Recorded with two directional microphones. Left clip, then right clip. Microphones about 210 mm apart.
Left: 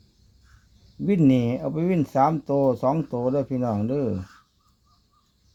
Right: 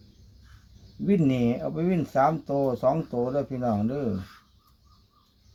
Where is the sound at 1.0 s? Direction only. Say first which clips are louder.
Left 3 dB; 50° left (ahead or behind).